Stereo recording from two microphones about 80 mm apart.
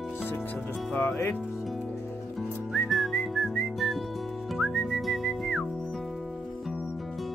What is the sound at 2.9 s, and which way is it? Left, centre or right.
Whistling, centre.